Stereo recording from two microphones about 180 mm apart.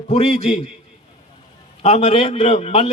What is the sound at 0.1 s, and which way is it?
Speech, 35° left (ahead or behind).